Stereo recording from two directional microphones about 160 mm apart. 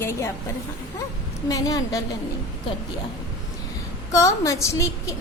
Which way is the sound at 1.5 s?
20° left (ahead or behind).